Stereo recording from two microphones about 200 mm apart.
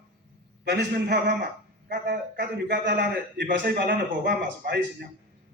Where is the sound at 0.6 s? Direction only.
55° right (ahead or behind).